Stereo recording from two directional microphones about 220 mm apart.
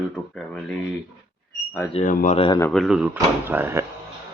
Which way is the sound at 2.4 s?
20° left (ahead or behind).